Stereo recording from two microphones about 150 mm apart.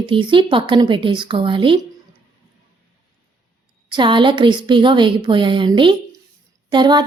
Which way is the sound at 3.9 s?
30° right (ahead or behind).